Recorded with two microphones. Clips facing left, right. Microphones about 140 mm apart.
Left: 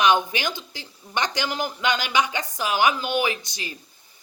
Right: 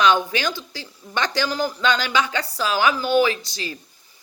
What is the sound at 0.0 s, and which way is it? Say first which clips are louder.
A woman's voice: right 2 dB; 20° left (ahead or behind).